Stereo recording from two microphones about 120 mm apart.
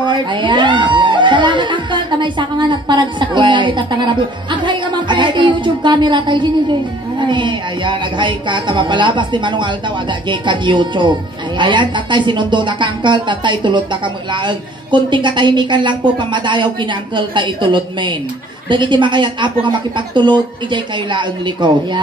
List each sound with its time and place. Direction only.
0.0 s speech: 40° right (ahead or behind)